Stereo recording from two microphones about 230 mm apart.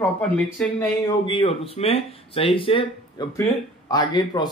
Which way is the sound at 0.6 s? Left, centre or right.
Centre.